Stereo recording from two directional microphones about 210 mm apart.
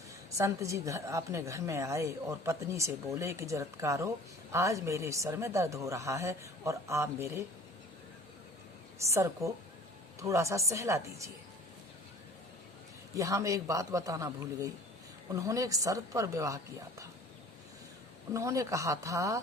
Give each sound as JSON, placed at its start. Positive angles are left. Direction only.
{"t": 0.3, "sound": "a woman's voice", "side_deg": -15}
{"t": 9.1, "sound": "a woman's voice", "side_deg": -15}
{"t": 13.1, "sound": "a woman's voice", "side_deg": -15}
{"t": 18.3, "sound": "a woman's voice", "side_deg": -15}